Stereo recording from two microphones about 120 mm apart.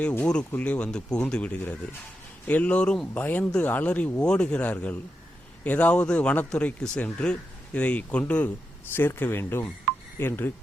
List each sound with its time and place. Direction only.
0.0 s speech: 15° left (ahead or behind)